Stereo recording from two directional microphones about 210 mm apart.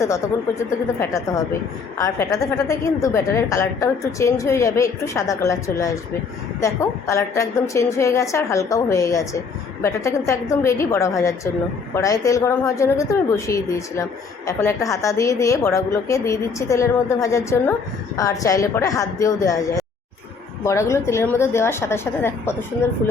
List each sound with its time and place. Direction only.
0.6 s a woman's voice: 15° left (ahead or behind)